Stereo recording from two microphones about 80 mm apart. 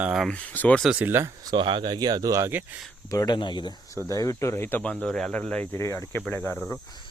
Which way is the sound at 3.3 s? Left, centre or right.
Left.